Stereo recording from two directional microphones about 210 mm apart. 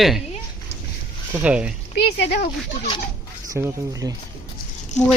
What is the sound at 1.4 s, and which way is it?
Speech, 5° right (ahead or behind).